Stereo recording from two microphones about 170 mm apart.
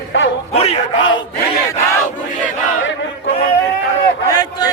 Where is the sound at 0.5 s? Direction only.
35° left (ahead or behind).